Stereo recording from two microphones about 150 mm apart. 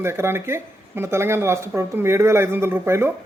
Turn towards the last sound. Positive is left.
turn(degrees=-15)  # may be behind; listen again after turning